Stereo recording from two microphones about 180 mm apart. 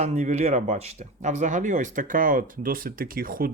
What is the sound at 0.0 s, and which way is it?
Speech, 40° right (ahead or behind).